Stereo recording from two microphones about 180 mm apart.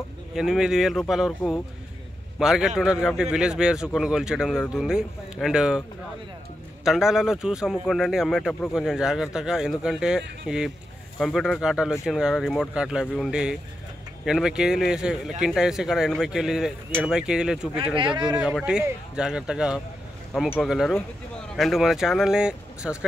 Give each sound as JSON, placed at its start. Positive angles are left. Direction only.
{"t": 0.3, "sound": "a man's voice", "side_deg": -5}
{"t": 17.9, "sound": "speech", "side_deg": -25}
{"t": 18.4, "sound": "speech", "side_deg": -5}